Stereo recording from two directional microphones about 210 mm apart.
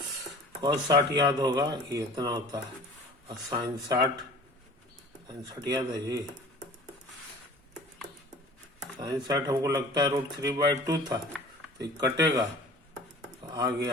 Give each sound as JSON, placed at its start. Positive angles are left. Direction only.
{"t": 0.6, "sound": "speech", "side_deg": -20}
{"t": 5.3, "sound": "speech", "side_deg": -20}
{"t": 9.0, "sound": "speech", "side_deg": -20}
{"t": 13.5, "sound": "speech", "side_deg": -20}